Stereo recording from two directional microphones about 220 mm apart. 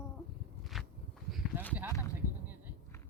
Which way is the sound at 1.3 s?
5° left (ahead or behind).